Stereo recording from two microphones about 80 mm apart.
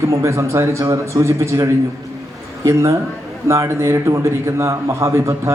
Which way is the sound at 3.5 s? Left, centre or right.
Right.